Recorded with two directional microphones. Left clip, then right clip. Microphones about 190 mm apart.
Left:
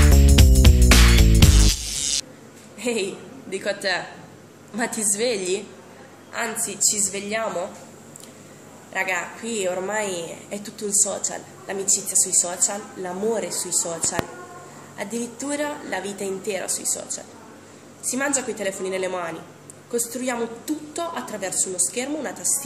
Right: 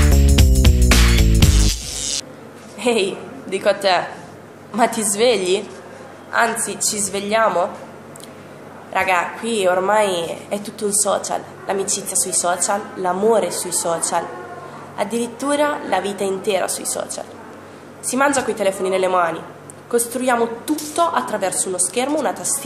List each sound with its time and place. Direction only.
0.0 s music: centre (ahead or behind)
2.8 s a woman's voice: 15° left (ahead or behind)
8.9 s a woman's voice: 15° left (ahead or behind)